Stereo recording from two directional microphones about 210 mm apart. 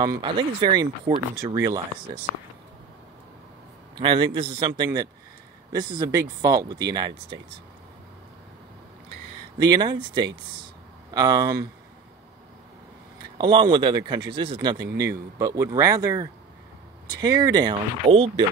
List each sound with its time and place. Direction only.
0.0 s speech: 20° right (ahead or behind)
4.0 s speech: 25° right (ahead or behind)
9.6 s speech: 20° right (ahead or behind)
13.4 s speech: 20° right (ahead or behind)